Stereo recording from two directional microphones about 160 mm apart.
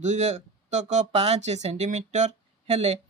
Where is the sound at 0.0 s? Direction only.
45° right (ahead or behind).